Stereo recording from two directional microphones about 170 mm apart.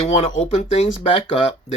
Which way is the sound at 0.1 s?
35° left (ahead or behind).